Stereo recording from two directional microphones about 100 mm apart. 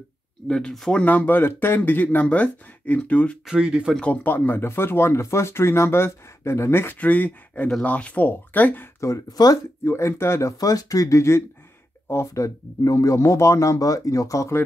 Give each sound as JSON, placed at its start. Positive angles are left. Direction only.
{"t": 0.5, "sound": "speech", "side_deg": 10}
{"t": 3.4, "sound": "speech", "side_deg": -10}
{"t": 3.9, "sound": "speech", "side_deg": 15}
{"t": 9.0, "sound": "speech", "side_deg": 35}